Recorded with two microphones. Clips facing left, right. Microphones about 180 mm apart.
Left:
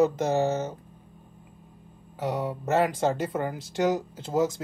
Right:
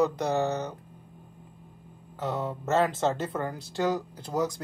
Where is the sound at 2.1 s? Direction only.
15° left (ahead or behind).